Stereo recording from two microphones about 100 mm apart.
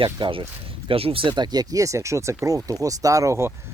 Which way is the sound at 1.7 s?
30° right (ahead or behind).